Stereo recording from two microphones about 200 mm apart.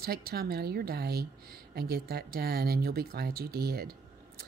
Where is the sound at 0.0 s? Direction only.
50° right (ahead or behind).